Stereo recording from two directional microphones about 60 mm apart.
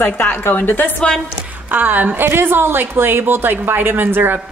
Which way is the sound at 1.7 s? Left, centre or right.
Right.